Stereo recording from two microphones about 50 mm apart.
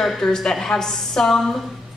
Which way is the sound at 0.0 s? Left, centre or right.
Centre.